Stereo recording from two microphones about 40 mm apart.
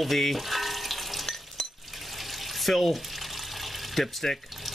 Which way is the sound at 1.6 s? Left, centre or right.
Centre.